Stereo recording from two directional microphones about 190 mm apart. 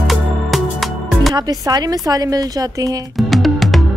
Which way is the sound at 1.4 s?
20° right (ahead or behind).